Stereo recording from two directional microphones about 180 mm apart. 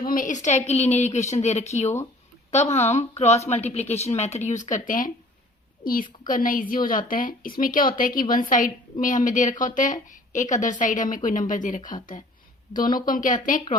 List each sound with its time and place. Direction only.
0.0 s a woman's voice: 50° left (ahead or behind)
0.4 s a woman's voice: 40° left (ahead or behind)
13.1 s a woman's voice: 50° left (ahead or behind)